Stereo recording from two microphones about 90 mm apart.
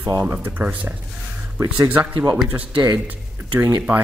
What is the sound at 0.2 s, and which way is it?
Speech, 20° right (ahead or behind).